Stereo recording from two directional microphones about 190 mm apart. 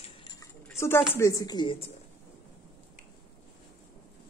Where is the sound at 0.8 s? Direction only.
15° left (ahead or behind).